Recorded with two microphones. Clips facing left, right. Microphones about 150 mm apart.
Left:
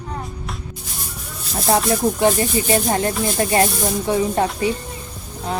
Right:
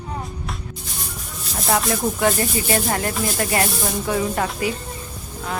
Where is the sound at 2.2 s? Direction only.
25° left (ahead or behind).